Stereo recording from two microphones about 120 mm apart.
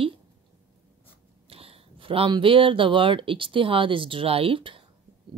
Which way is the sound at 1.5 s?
50° right (ahead or behind).